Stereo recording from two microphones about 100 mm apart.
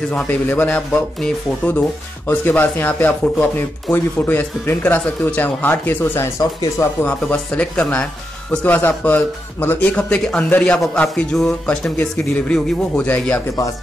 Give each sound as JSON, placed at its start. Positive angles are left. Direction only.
{"t": 0.1, "sound": "speech", "side_deg": 20}
{"t": 7.1, "sound": "speech", "side_deg": 15}